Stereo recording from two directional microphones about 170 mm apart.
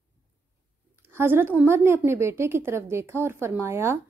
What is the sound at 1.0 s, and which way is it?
A woman's voice, 15° right (ahead or behind).